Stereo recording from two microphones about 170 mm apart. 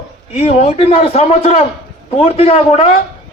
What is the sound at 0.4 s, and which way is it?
A man's voice, 35° left (ahead or behind).